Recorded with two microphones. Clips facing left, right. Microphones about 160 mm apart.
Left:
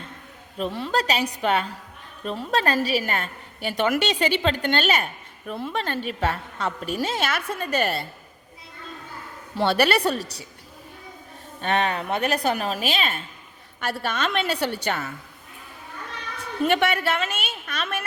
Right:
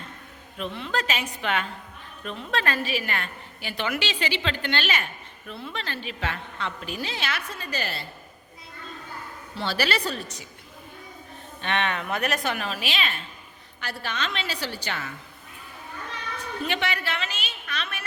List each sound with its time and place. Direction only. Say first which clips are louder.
0.5 s a woman's voice: left 5 dB; 40° left (ahead or behind); by 8.0 s 55° left (ahead or behind)
9.6 s a woman's voice: left 7 dB; 60° left (ahead or behind)
10.2 s a woman's voice: left 4 dB; 35° left (ahead or behind)
11.6 s a woman's voice: left 4 dB; 40° left (ahead or behind)
16.6 s a woman's voice: left 8 dB; 50° left (ahead or behind)